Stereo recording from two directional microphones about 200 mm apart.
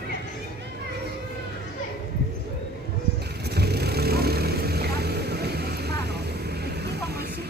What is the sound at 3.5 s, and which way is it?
Vehicle, 55° right (ahead or behind).